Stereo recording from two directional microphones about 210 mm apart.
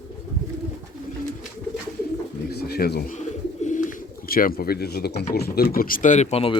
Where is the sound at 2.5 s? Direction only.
50° left (ahead or behind).